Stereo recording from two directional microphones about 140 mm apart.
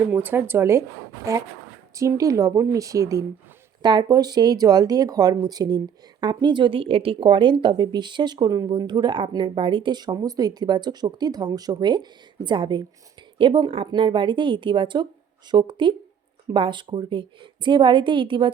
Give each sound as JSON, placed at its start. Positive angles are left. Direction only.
{"t": 0.0, "sound": "speech", "side_deg": -15}